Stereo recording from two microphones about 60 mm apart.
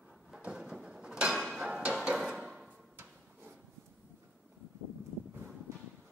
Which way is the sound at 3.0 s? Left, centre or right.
Right.